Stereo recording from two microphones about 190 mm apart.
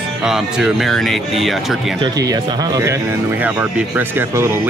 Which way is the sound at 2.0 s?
20° right (ahead or behind).